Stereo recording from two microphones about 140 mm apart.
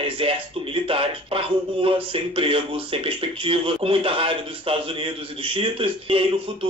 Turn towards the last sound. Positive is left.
turn(degrees=-40)  # may be behind; listen again after turning